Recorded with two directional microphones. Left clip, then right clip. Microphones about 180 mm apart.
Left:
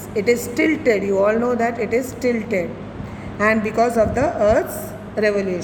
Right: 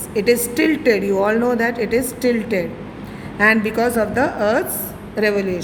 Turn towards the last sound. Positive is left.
turn(degrees=-30)  # may be behind; listen again after turning